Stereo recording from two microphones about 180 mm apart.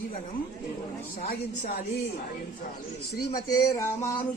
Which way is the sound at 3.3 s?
20° left (ahead or behind).